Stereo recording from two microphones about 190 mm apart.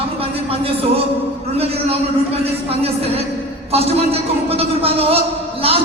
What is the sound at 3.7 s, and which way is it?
Speech, 30° right (ahead or behind).